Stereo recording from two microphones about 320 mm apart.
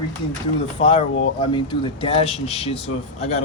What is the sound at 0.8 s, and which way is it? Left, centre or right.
Speech, centre.